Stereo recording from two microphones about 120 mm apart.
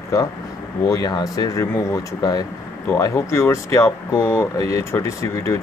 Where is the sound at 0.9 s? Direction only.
30° left (ahead or behind).